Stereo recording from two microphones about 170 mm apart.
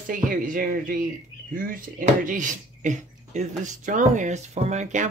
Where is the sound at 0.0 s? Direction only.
55° right (ahead or behind).